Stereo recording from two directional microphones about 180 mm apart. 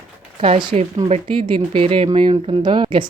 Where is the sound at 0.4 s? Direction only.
30° right (ahead or behind).